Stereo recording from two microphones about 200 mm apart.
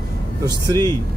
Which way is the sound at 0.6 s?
20° right (ahead or behind).